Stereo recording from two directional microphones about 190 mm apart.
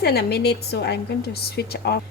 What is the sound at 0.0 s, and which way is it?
A woman's voice, 55° left (ahead or behind).